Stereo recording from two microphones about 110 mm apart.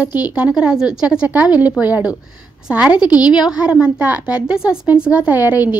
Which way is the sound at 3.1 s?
35° left (ahead or behind).